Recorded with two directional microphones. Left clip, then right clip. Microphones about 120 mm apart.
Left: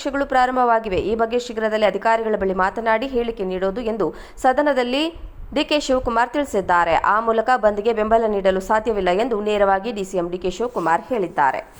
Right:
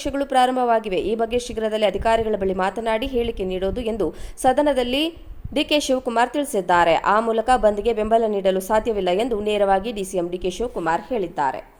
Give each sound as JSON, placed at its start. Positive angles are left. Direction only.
{"t": 0.0, "sound": "a woman's voice", "side_deg": -20}
{"t": 11.1, "sound": "a woman's voice", "side_deg": 5}